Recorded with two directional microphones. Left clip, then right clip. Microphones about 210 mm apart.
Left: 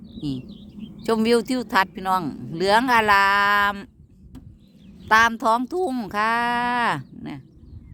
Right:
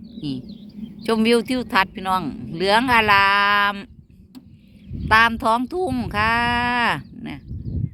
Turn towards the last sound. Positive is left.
turn(degrees=5)  # may be behind; listen again after turning